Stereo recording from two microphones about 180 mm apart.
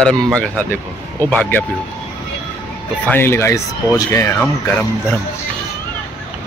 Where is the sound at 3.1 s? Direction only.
10° left (ahead or behind).